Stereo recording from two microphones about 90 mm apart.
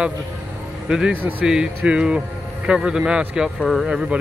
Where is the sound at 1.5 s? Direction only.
10° right (ahead or behind).